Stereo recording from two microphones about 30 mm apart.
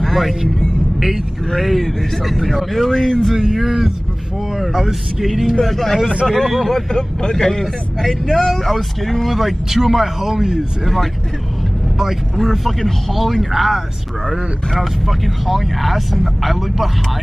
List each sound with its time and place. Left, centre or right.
0.0 s vehicle: centre
1.6 s speech: centre
3.5 s speech: centre
5.6 s speech: centre
6.9 s a man's voice: left
7.6 s speech: centre
12.0 s speech: centre